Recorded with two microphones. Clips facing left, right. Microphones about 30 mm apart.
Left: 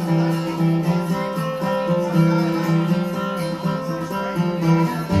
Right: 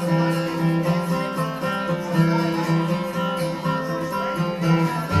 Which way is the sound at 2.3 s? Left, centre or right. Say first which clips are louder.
Left 2 dB; centre.